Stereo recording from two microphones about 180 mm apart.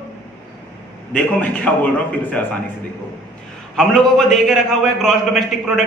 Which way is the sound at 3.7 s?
5° left (ahead or behind).